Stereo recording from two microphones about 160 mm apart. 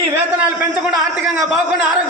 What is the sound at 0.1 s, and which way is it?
Speech, 10° right (ahead or behind).